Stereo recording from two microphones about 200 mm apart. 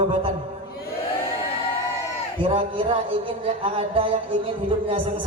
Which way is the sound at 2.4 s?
25° right (ahead or behind).